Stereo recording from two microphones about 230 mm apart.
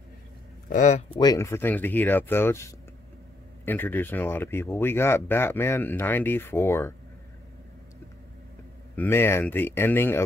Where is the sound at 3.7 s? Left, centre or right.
Centre.